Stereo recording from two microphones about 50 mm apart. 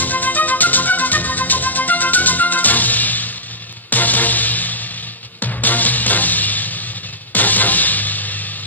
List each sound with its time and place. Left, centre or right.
0.0 s music: left